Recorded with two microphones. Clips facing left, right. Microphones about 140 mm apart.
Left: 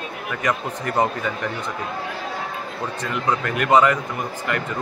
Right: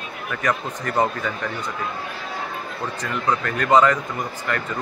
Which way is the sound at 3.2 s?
15° left (ahead or behind).